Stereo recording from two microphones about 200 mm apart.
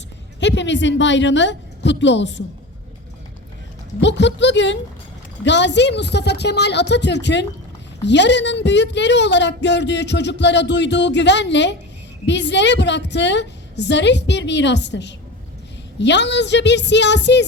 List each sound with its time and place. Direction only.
0.3 s a woman's voice: 65° left (ahead or behind)
4.0 s a woman's voice: 60° left (ahead or behind)